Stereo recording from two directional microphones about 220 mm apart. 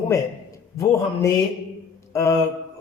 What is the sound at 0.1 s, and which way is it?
A man's voice, 15° left (ahead or behind).